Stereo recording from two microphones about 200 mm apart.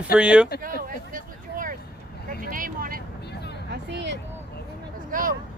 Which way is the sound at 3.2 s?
55° left (ahead or behind).